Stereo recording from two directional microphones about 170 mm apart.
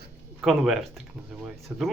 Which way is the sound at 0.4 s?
Centre (ahead or behind).